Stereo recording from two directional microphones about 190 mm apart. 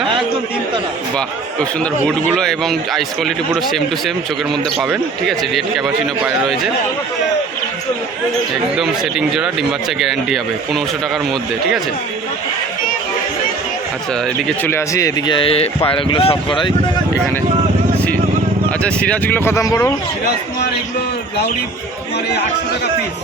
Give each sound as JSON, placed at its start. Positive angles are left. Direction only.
{"t": 1.1, "sound": "speech", "side_deg": 5}
{"t": 8.7, "sound": "speech", "side_deg": 0}
{"t": 14.4, "sound": "speech", "side_deg": 10}
{"t": 18.8, "sound": "speech", "side_deg": 5}